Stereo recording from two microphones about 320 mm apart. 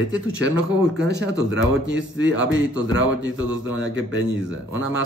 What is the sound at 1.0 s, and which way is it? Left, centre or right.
Speech, right.